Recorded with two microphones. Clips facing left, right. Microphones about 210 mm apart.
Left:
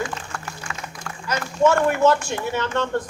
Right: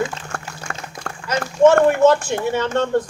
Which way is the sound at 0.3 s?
50° right (ahead or behind).